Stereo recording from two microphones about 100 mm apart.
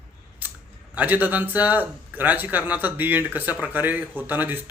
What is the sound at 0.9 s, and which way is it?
A man's voice, 20° right (ahead or behind).